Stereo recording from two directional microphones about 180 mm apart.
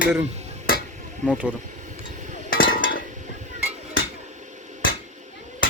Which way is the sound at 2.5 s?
55° left (ahead or behind).